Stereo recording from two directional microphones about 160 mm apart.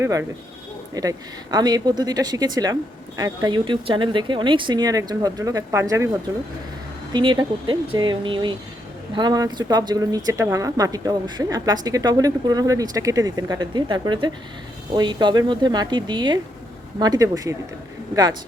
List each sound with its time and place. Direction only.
0.0 s speech: 15° right (ahead or behind)